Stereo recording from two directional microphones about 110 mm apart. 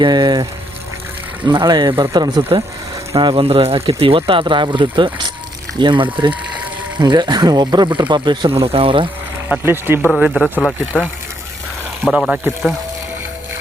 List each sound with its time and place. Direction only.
0.0 s speech: 40° right (ahead or behind)
1.5 s speech: 40° right (ahead or behind)
8.5 s speech: 60° right (ahead or behind)
9.6 s speech: 20° right (ahead or behind)
10.2 s speech: 5° right (ahead or behind)
12.2 s speech: centre (ahead or behind)